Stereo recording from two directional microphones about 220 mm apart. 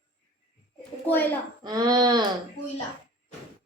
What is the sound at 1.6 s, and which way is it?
Speech, 20° right (ahead or behind).